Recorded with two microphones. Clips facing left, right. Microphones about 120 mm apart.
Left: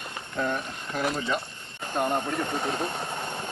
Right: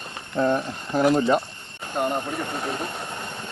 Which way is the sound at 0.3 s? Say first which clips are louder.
Right 7 dB; 35° right (ahead or behind).